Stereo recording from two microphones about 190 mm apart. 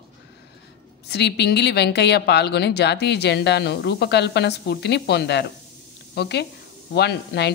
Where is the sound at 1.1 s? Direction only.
60° left (ahead or behind).